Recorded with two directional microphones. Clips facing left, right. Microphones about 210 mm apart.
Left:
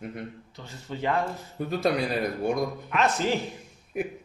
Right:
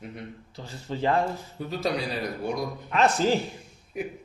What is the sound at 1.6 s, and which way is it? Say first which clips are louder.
Mantra: left 4 dB; 50° left (ahead or behind).